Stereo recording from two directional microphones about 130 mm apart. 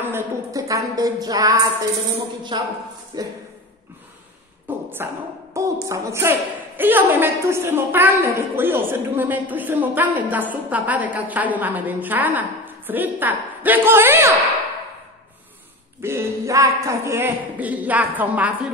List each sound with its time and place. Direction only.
0.0 s a woman's voice: 20° right (ahead or behind)
2.5 s a woman's voice: 40° right (ahead or behind)
4.7 s a sound: 15° right (ahead or behind)
5.5 s a woman's voice: 20° right (ahead or behind)
16.0 s a woman's voice: 20° right (ahead or behind)